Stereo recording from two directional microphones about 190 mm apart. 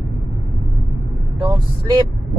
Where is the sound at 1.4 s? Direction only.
25° right (ahead or behind).